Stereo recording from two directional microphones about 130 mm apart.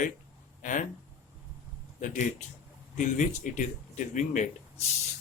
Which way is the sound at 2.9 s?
75° left (ahead or behind).